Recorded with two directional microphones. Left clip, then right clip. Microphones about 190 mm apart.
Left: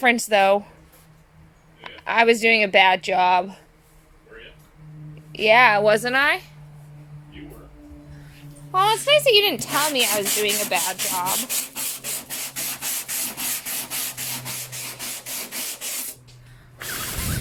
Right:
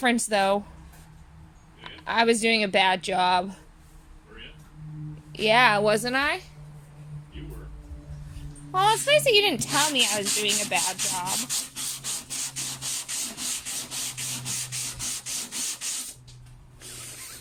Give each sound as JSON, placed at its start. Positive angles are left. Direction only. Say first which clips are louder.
{"t": 0.0, "sound": "speech", "louder": "left 6 dB", "side_deg": 10}
{"t": 1.8, "sound": "speech", "louder": "left 5 dB", "side_deg": 15}
{"t": 5.3, "sound": "speech", "louder": "left 5 dB", "side_deg": 10}
{"t": 8.7, "sound": "speech", "louder": "left 3 dB", "side_deg": 0}
{"t": 12.8, "sound": "rub", "louder": "left 3 dB", "side_deg": 45}